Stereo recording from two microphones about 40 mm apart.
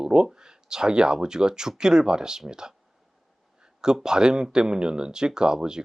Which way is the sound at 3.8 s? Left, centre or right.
Centre.